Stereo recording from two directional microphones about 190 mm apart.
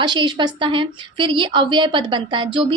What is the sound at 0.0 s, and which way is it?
A woman's voice, 25° right (ahead or behind).